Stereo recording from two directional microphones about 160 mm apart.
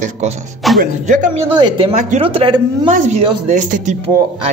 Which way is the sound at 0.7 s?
55° right (ahead or behind).